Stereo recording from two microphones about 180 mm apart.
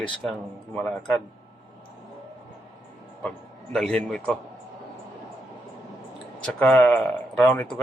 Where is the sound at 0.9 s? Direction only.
5° left (ahead or behind).